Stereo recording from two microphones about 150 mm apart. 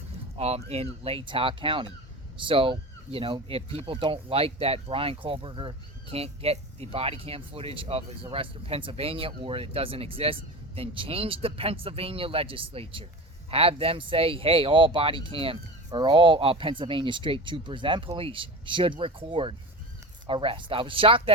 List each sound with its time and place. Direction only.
0.3 s speech: 45° right (ahead or behind)